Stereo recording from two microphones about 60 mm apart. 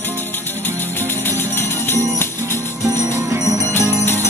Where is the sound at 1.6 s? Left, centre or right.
Left.